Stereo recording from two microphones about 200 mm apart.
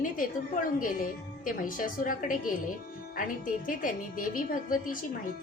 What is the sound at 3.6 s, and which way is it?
A woman's voice, 45° left (ahead or behind).